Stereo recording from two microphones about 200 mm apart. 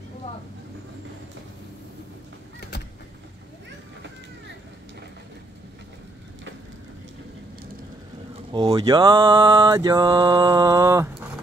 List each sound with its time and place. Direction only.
8.5 s mantra: 20° right (ahead or behind)